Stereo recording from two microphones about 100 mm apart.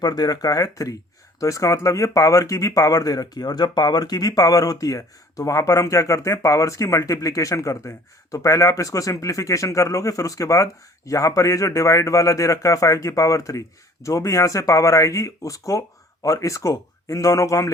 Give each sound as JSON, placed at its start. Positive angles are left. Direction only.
{"t": 0.0, "sound": "speech", "side_deg": 40}